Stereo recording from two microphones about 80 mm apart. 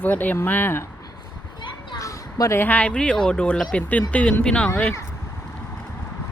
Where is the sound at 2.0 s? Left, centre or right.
Left.